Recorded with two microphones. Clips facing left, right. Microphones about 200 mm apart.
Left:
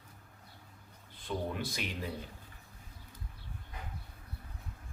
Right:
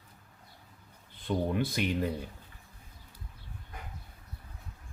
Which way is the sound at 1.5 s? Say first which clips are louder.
Right 9 dB; 55° right (ahead or behind).